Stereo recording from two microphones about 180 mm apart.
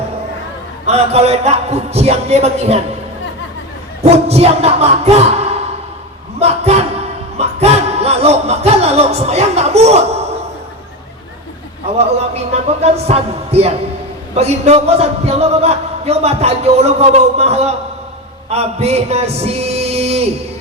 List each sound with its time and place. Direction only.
0.9 s a man's voice: 35° right (ahead or behind)
4.3 s a man's voice: 35° right (ahead or behind)
12.1 s a man's voice: 35° right (ahead or behind)
18.4 s a sound: 35° right (ahead or behind)